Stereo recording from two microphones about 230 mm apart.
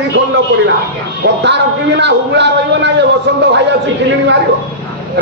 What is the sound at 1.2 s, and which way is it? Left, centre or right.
A man's voice, right.